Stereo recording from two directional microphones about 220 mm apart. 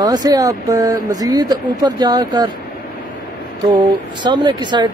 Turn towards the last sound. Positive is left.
turn(degrees=-20)  # may be behind; listen again after turning